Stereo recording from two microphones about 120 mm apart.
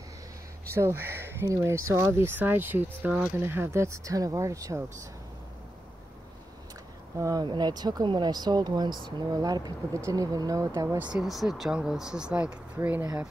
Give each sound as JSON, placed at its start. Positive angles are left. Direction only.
{"t": 0.7, "sound": "speech", "side_deg": -20}
{"t": 7.2, "sound": "speech", "side_deg": -30}
{"t": 11.1, "sound": "speech", "side_deg": -5}